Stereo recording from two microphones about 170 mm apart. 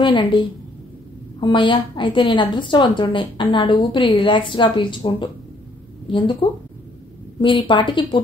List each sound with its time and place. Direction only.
0.0 s a woman's voice: 30° left (ahead or behind)
1.4 s a woman's voice: 30° left (ahead or behind)